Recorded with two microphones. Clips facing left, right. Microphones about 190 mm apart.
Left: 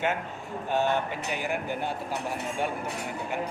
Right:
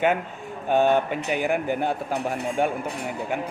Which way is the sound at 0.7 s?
55° right (ahead or behind).